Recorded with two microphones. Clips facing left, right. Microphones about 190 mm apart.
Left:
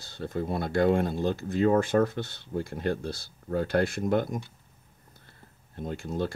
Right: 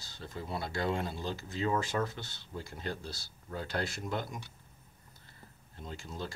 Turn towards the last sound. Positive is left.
turn(degrees=55)  # may be behind; listen again after turning